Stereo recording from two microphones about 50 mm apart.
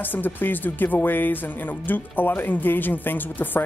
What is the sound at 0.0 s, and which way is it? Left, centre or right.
Speech, left.